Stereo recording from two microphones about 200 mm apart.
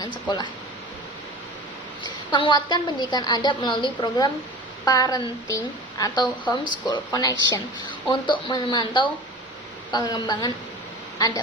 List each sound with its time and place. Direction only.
2.3 s a woman's voice: 25° left (ahead or behind)